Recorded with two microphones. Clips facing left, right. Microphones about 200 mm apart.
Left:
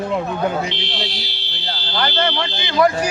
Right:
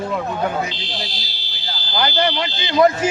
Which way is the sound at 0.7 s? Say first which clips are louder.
Left 3 dB; 65° left (ahead or behind).